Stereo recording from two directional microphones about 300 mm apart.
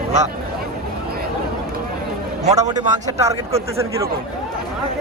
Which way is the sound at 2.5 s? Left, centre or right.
Centre.